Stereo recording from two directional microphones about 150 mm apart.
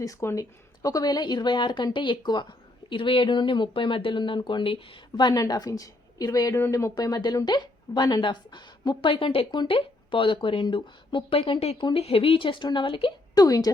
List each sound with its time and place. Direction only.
0.0 s speech: 20° left (ahead or behind); by 13.1 s 35° left (ahead or behind)
13.3 s speech: 25° left (ahead or behind)